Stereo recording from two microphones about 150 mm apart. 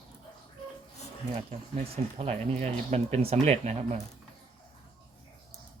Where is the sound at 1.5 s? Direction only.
40° right (ahead or behind).